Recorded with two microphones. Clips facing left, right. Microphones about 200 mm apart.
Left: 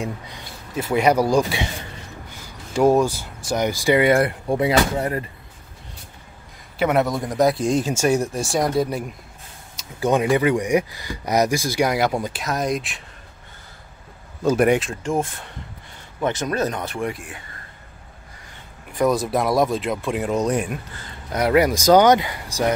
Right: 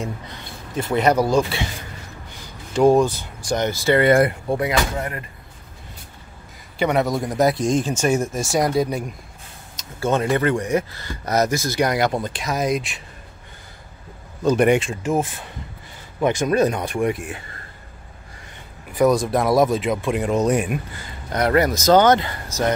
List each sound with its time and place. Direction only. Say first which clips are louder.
0.7 s speech: even; 10° left (ahead or behind)
2.7 s speech: right 1 dB; 10° left (ahead or behind)
4.6 s speech: left 3 dB; 30° left (ahead or behind)
6.8 s speech: even; centre (ahead or behind)
9.8 s speech: left 1 dB; 15° left (ahead or behind)
14.4 s speech: right 1 dB; 5° left (ahead or behind)
16.2 s speech: right 4 dB; 15° right (ahead or behind)
18.9 s speech: right 2 dB; centre (ahead or behind)
21.3 s speech: left 1 dB; 5° left (ahead or behind)